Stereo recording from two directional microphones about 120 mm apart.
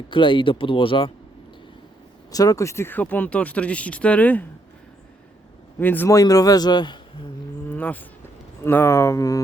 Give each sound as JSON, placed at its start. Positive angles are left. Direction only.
{"t": 0.1, "sound": "speech", "side_deg": 40}
{"t": 2.3, "sound": "speech", "side_deg": 30}
{"t": 5.8, "sound": "speech", "side_deg": 15}
{"t": 6.1, "sound": "a man's voice", "side_deg": 30}
{"t": 7.7, "sound": "a sound", "side_deg": 15}
{"t": 8.6, "sound": "speech", "side_deg": 20}